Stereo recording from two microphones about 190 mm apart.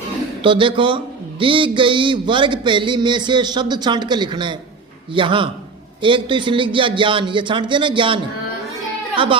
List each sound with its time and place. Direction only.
0.4 s a man's voice: 25° right (ahead or behind)